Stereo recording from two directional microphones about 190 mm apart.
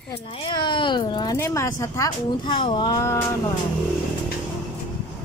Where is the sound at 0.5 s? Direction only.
25° left (ahead or behind).